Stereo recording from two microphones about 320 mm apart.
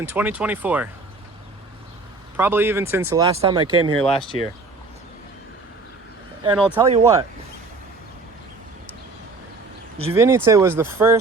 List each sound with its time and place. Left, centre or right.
0.0 s speech: centre
2.3 s speech: centre
4.0 s speech: centre
6.4 s speech: centre
10.2 s speech: centre